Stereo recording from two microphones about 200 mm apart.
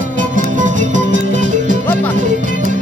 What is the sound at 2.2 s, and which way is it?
Music, 40° right (ahead or behind).